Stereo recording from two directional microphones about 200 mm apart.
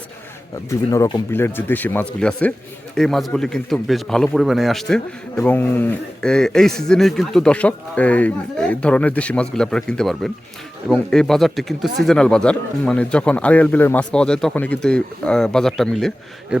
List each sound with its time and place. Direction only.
0.7 s a man's voice: 15° left (ahead or behind)